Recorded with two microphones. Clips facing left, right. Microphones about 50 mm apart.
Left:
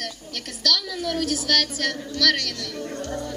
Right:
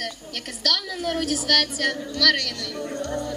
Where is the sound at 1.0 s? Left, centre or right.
Right.